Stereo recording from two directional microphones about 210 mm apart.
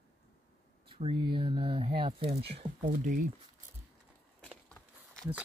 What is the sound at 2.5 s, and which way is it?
Speech, 40° right (ahead or behind).